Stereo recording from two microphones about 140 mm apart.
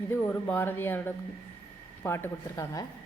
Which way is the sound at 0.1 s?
15° left (ahead or behind).